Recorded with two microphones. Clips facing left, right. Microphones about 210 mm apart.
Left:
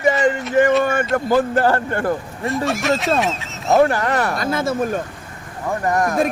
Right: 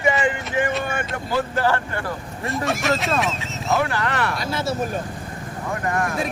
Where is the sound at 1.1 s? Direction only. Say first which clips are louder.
Left 7 dB; 50° left (ahead or behind).